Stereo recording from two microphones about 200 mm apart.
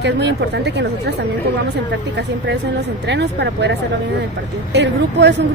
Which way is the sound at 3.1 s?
60° right (ahead or behind).